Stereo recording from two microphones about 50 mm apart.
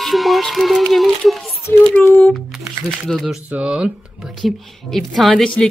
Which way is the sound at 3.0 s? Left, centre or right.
Centre.